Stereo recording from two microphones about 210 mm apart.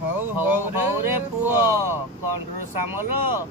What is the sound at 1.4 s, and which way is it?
Speech, 10° right (ahead or behind).